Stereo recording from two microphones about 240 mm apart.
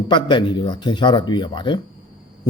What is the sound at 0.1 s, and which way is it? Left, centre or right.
A man's voice, centre.